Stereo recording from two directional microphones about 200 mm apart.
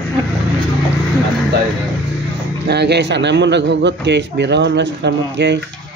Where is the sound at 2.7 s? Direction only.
55° right (ahead or behind).